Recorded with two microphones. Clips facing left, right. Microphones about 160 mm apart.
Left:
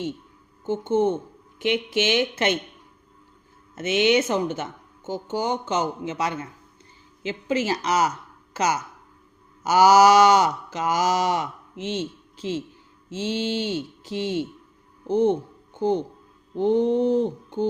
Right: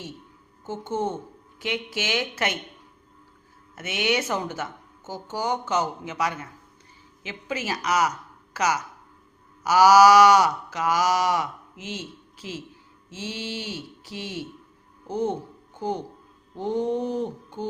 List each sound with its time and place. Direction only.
0.6 s speech: 20° left (ahead or behind)
3.8 s speech: 25° left (ahead or behind)
16.6 s speech: 25° left (ahead or behind)